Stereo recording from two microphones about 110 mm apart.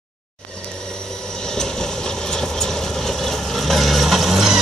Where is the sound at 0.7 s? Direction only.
5° left (ahead or behind).